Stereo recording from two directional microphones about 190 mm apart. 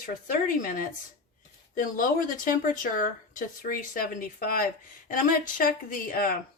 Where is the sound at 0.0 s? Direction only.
45° left (ahead or behind).